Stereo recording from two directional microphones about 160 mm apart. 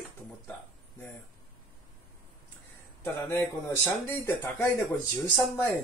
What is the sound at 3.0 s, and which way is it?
Speech, 15° left (ahead or behind).